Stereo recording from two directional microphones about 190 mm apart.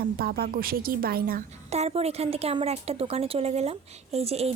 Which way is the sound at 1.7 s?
35° right (ahead or behind).